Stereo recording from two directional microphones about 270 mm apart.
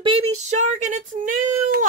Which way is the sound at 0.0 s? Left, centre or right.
Centre.